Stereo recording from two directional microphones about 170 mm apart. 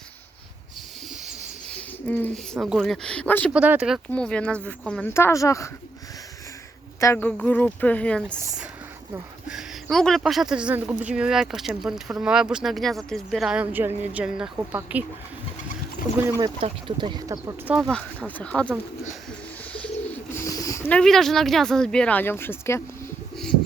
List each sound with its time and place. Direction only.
2.0 s speech: 10° left (ahead or behind)
3.5 s speech: 5° right (ahead or behind); by 5.6 s 15° left (ahead or behind)
7.0 s speech: 10° left (ahead or behind)
9.5 s speech: centre (ahead or behind)
16.0 s speech: 60° left (ahead or behind)
16.4 s speech: 30° right (ahead or behind)
17.7 s speech: centre (ahead or behind)
20.3 s speech: 20° left (ahead or behind)